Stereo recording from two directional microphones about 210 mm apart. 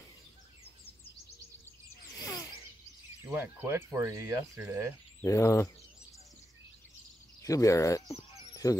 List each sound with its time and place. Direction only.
2.1 s a sound: 15° left (ahead or behind)
3.3 s speech: 10° right (ahead or behind)
5.2 s speech: 15° left (ahead or behind)
7.4 s speech: 15° left (ahead or behind)